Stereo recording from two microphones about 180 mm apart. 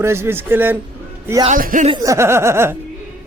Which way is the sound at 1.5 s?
50° right (ahead or behind).